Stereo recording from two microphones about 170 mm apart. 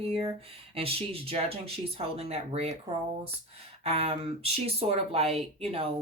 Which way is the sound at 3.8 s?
35° right (ahead or behind).